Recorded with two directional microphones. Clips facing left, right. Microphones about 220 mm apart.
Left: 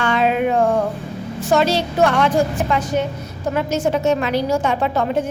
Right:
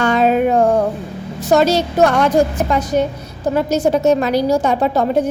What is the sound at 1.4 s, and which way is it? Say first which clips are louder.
A woman's voice: right 4 dB; 40° right (ahead or behind).